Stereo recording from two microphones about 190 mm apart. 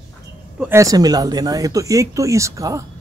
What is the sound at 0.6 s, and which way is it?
Speech, 15° right (ahead or behind).